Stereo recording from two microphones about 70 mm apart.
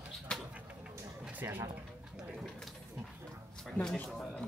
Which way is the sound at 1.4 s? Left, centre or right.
Right.